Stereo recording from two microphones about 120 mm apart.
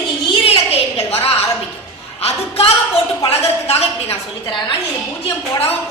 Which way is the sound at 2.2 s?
55° left (ahead or behind).